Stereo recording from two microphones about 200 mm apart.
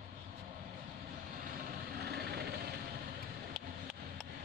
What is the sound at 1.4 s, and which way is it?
Vehicle, 45° right (ahead or behind).